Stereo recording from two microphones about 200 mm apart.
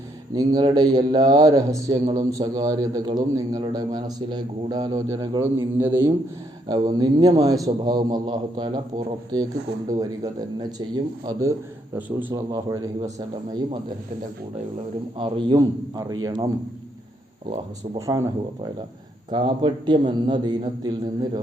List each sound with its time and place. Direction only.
0.3 s a man's voice: 20° right (ahead or behind)
10.6 s a man's voice: 20° right (ahead or behind)
15.2 s a man's voice: 25° right (ahead or behind)
17.9 s a man's voice: 15° right (ahead or behind)